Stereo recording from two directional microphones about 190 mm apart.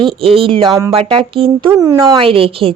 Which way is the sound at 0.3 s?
30° right (ahead or behind).